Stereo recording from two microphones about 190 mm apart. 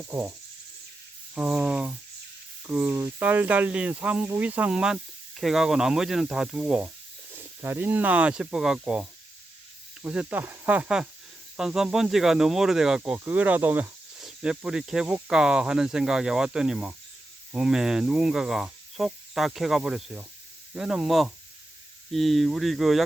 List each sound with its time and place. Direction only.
0.1 s speech: 15° right (ahead or behind)
1.4 s speech: 5° right (ahead or behind)